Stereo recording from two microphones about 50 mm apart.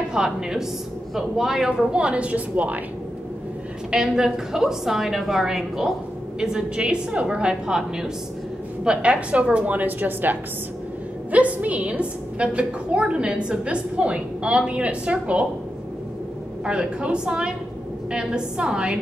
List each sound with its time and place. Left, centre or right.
0.1 s a woman's voice: centre; by 2.8 s right
3.9 s a woman's voice: centre
6.4 s a woman's voice: centre; by 10.3 s right
11.3 s a woman's voice: right
16.6 s a woman's voice: centre